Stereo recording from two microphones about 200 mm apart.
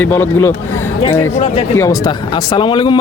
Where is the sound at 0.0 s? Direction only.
10° left (ahead or behind).